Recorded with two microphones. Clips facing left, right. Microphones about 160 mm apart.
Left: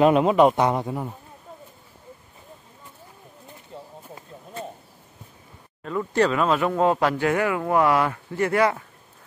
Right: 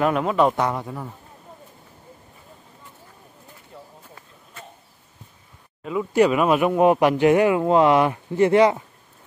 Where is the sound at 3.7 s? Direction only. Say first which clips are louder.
Left 3 dB; 25° left (ahead or behind).